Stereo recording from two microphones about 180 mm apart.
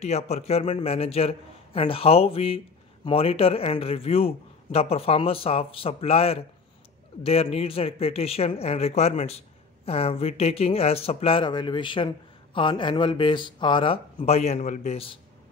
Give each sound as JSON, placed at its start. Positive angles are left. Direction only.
{"t": 0.0, "sound": "a man's voice", "side_deg": 35}